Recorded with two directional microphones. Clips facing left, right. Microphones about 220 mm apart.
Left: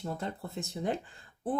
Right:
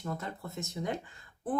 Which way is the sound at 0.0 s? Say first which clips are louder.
Left 2 dB; 30° left (ahead or behind).